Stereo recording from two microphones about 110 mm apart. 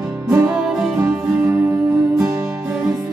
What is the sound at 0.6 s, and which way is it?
Music, 5° right (ahead or behind).